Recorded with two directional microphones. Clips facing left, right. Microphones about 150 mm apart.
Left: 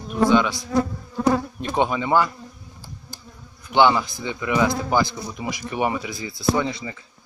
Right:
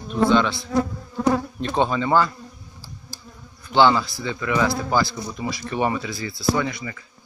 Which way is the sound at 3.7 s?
15° left (ahead or behind).